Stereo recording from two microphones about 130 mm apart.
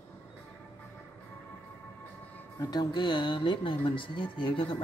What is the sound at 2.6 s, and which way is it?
Speech, 30° left (ahead or behind).